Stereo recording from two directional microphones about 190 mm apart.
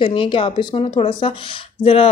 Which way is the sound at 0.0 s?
25° left (ahead or behind).